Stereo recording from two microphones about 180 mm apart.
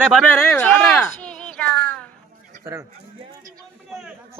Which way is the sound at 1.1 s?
5° left (ahead or behind).